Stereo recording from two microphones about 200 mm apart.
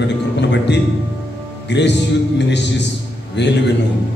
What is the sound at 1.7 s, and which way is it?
A man's voice, 60° left (ahead or behind).